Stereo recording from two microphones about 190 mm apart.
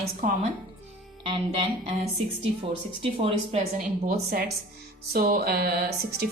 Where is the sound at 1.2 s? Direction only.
30° right (ahead or behind).